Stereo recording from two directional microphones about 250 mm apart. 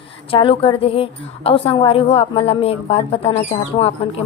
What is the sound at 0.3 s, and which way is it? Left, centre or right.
A woman's voice, left.